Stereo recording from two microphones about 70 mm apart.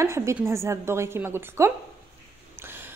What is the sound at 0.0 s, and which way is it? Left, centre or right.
A woman's voice, right.